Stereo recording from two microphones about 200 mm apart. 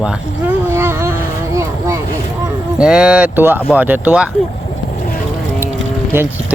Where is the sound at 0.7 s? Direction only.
10° right (ahead or behind).